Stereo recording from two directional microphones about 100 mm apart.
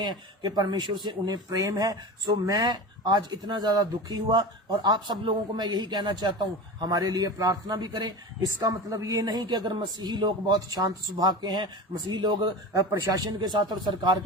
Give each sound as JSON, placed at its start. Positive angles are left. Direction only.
{"t": 0.0, "sound": "a man's voice", "side_deg": -45}
{"t": 12.7, "sound": "a man's voice", "side_deg": -35}